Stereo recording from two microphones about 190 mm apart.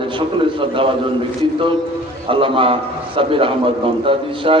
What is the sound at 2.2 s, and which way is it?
A man's voice, 25° right (ahead or behind).